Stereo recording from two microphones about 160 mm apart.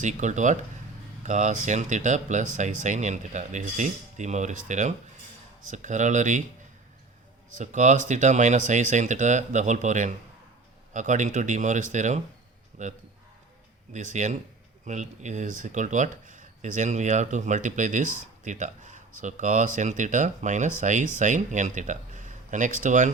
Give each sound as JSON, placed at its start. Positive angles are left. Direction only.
{"t": 0.0, "sound": "speech", "side_deg": -50}
{"t": 7.5, "sound": "speech", "side_deg": -50}